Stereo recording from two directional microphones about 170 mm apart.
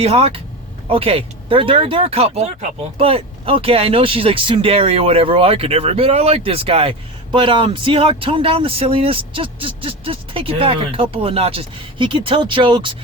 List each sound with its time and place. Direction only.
0.0 s speech: 35° right (ahead or behind)